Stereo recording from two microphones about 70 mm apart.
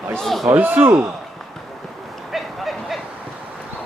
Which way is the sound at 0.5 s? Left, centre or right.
Right.